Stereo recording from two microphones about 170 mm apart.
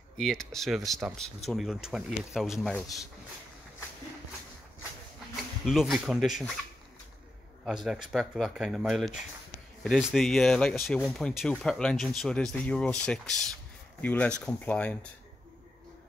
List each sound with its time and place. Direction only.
0.2 s speech: centre (ahead or behind)
5.7 s speech: centre (ahead or behind)
7.6 s speech: centre (ahead or behind)